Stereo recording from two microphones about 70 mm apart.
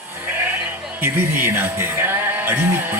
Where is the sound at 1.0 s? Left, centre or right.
Right.